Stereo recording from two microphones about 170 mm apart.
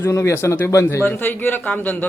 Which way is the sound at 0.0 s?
15° left (ahead or behind).